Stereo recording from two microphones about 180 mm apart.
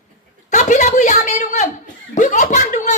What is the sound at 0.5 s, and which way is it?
A woman's voice, 45° left (ahead or behind).